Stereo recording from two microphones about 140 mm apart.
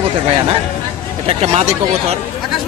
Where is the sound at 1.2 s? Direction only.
50° right (ahead or behind).